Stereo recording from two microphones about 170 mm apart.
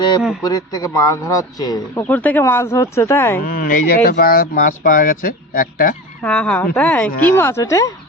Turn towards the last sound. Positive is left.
turn(degrees=20)  # may be behind; listen again after turning